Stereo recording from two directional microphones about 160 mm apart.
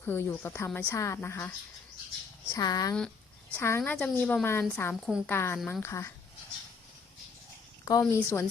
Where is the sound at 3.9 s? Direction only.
5° left (ahead or behind).